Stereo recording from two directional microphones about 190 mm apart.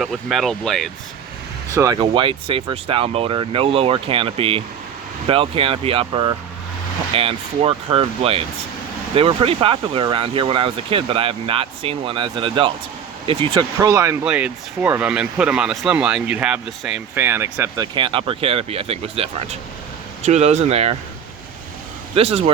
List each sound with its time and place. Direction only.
0.0 s speech: centre (ahead or behind)
1.7 s speech: 20° right (ahead or behind)
13.7 s speech: 15° right (ahead or behind)
17.9 s speech: 25° right (ahead or behind)
22.1 s speech: 30° right (ahead or behind)